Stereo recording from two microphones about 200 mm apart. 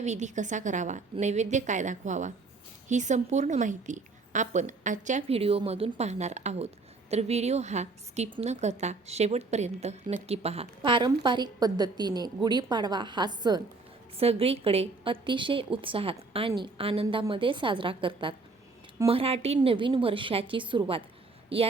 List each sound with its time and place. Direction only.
0.0 s a woman's voice: 35° right (ahead or behind)